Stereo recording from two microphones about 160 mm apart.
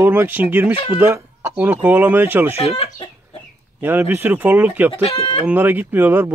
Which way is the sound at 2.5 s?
40° left (ahead or behind).